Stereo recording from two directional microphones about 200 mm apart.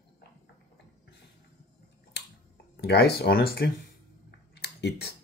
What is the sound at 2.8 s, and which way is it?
Speech, 55° left (ahead or behind).